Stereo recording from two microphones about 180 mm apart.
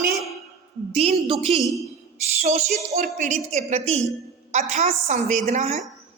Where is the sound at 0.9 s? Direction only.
35° right (ahead or behind).